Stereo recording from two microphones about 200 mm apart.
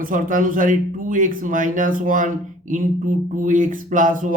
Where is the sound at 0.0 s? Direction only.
40° right (ahead or behind).